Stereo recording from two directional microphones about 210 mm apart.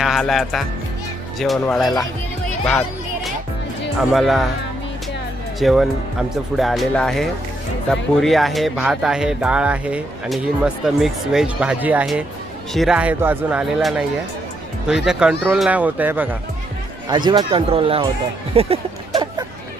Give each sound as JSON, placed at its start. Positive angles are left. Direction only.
{"t": 0.0, "sound": "speech", "side_deg": 0}
{"t": 4.1, "sound": "speech", "side_deg": 0}
{"t": 5.5, "sound": "speech", "side_deg": 0}
{"t": 17.1, "sound": "speech", "side_deg": -20}
{"t": 18.5, "sound": "a sound", "side_deg": -25}